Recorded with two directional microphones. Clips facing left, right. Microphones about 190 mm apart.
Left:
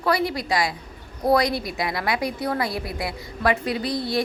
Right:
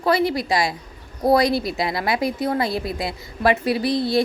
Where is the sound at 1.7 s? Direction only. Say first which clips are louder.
Right 3 dB; 25° right (ahead or behind).